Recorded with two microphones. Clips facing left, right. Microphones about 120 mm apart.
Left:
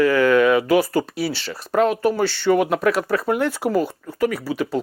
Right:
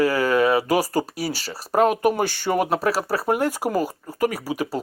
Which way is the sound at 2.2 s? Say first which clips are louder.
Left 4 dB; 45° right (ahead or behind).